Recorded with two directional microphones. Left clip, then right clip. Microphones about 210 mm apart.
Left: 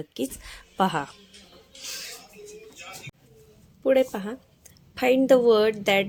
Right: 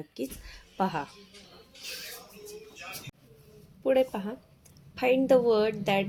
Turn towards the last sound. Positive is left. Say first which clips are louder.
# left 5 dB
turn(degrees=25)  # may be behind; listen again after turning